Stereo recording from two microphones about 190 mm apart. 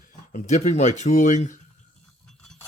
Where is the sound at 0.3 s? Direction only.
35° left (ahead or behind).